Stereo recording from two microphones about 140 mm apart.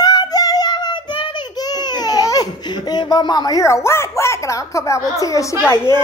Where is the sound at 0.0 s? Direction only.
30° left (ahead or behind).